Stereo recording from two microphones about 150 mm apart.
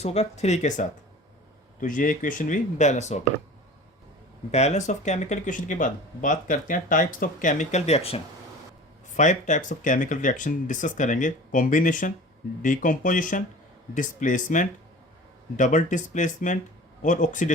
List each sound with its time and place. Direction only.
0.0 s speech: 45° left (ahead or behind)
1.8 s speech: 60° left (ahead or behind)
4.5 s speech: 50° left (ahead or behind)
9.1 s speech: 55° left (ahead or behind)